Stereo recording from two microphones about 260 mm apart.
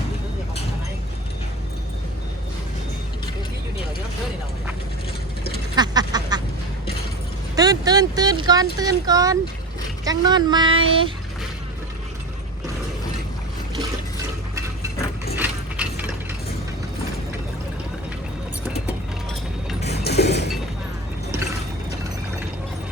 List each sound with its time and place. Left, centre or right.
5.7 s duck: centre
7.5 s speech: centre
15.4 s mechanisms: centre
20.1 s mechanisms: left